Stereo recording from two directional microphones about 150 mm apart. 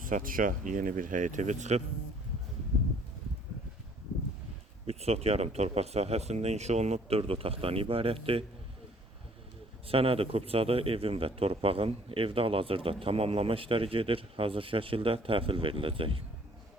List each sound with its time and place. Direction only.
0.0 s speech: 65° right (ahead or behind); by 1.8 s 50° right (ahead or behind)
4.9 s speech: 45° right (ahead or behind)
9.8 s speech: 40° right (ahead or behind)